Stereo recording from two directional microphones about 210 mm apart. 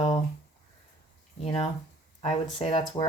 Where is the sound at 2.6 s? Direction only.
25° left (ahead or behind).